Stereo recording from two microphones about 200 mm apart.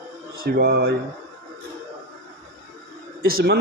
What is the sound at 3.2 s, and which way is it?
Speech, 50° right (ahead or behind).